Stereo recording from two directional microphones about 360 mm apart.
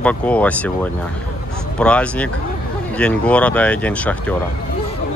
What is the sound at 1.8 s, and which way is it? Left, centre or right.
Speech, centre.